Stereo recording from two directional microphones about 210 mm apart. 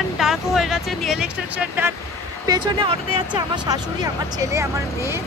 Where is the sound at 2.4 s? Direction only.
20° right (ahead or behind).